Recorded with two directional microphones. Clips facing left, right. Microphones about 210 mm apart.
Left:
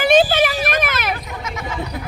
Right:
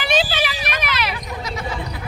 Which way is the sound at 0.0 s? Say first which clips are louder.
Left 7 dB; 50° left (ahead or behind).